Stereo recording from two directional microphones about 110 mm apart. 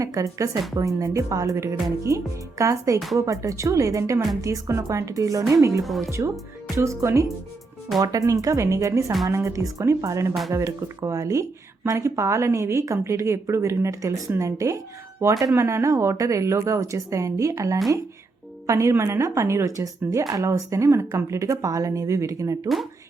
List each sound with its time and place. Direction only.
0.0 s a woman's voice: 30° right (ahead or behind)